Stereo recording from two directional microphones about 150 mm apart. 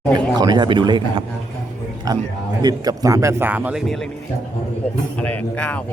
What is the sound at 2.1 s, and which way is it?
Mantra, 25° right (ahead or behind).